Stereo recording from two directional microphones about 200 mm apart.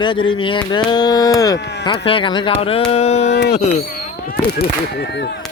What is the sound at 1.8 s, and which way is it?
Speech, 25° left (ahead or behind).